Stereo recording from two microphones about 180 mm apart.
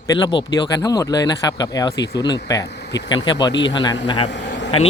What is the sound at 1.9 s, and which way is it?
Speech, 70° left (ahead or behind).